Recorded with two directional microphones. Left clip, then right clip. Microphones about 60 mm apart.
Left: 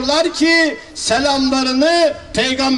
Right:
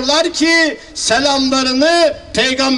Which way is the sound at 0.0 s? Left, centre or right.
Centre.